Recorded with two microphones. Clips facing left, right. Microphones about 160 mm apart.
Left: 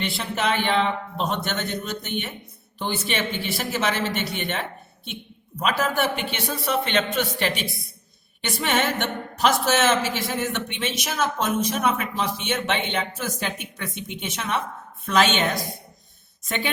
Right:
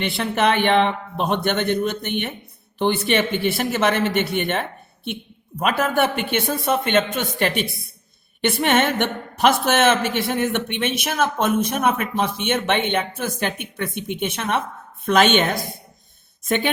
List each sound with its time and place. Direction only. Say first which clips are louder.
0.0 s speech: right 6 dB; 55° right (ahead or behind)